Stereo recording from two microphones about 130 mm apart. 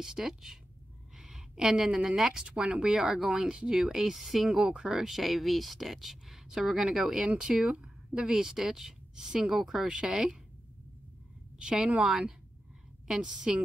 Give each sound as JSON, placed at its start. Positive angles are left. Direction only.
{"t": 0.0, "sound": "speech", "side_deg": -5}
{"t": 11.5, "sound": "a woman's voice", "side_deg": -5}